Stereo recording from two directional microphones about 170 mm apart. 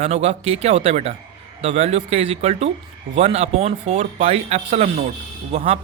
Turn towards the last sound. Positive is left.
turn(degrees=-35)  # may be behind; listen again after turning